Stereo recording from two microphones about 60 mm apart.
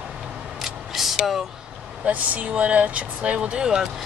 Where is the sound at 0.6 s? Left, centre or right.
Centre.